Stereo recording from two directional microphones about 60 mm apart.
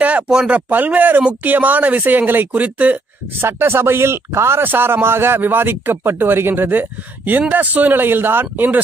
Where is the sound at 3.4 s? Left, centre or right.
Right.